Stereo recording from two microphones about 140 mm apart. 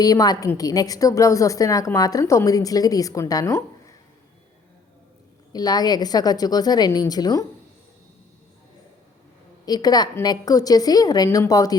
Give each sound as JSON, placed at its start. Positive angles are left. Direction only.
{"t": 0.0, "sound": "a woman's voice", "side_deg": 25}
{"t": 5.5, "sound": "a woman's voice", "side_deg": 30}
{"t": 9.6, "sound": "a woman's voice", "side_deg": 30}